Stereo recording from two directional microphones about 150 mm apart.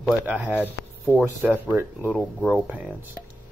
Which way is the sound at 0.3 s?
10° right (ahead or behind).